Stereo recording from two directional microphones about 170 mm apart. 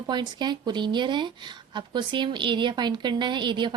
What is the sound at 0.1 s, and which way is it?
A woman's voice, 25° right (ahead or behind).